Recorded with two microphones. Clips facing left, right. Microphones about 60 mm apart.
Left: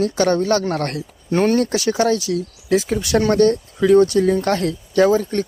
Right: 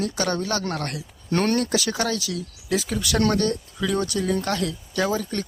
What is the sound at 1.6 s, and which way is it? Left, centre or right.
Speech, left.